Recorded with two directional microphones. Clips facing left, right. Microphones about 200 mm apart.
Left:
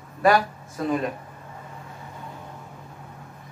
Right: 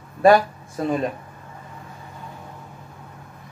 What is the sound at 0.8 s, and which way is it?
Speech, 30° right (ahead or behind).